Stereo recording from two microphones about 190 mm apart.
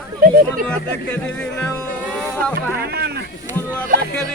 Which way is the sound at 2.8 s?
55° right (ahead or behind).